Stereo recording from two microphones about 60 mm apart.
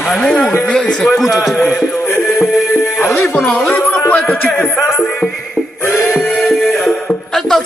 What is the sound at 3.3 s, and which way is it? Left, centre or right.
Speech, centre.